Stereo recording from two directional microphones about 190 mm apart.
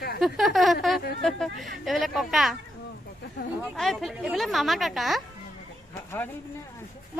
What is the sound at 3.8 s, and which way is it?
Speech, centre (ahead or behind).